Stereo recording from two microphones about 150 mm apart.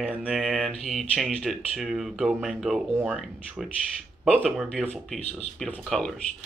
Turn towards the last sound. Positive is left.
turn(degrees=5)  # may be behind; listen again after turning